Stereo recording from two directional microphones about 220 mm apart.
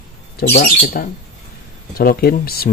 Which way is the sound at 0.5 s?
45° left (ahead or behind).